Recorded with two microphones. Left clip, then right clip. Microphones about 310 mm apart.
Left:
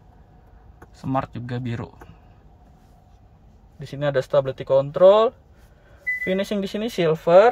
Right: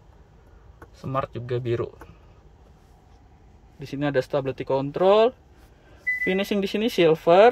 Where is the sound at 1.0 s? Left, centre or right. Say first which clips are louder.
Left 2 dB; centre.